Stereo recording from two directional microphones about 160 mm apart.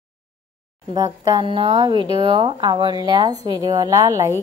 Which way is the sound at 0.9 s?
25° right (ahead or behind).